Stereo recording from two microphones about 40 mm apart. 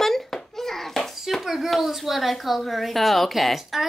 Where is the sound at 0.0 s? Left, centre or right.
Centre.